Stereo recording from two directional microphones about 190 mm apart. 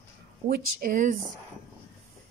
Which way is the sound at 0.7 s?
40° right (ahead or behind).